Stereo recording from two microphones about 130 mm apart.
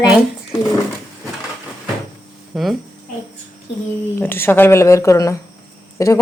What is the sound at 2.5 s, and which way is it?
Speech, centre (ahead or behind).